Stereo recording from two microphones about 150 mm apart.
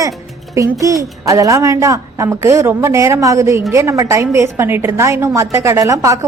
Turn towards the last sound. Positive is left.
turn(degrees=-20)  # may be behind; listen again after turning